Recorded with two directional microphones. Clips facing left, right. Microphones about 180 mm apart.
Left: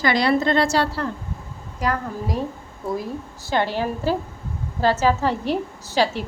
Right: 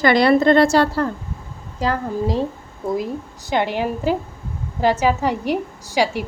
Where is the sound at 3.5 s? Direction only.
15° right (ahead or behind).